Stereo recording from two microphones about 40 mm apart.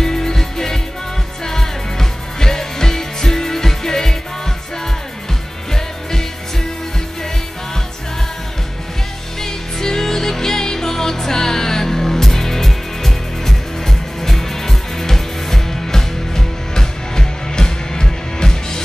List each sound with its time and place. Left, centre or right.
0.0 s music: centre
9.4 s music: centre